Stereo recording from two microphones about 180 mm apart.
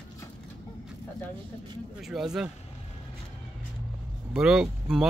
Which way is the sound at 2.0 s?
Centre (ahead or behind).